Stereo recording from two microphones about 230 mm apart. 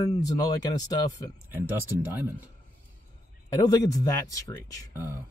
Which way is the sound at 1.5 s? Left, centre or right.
Centre.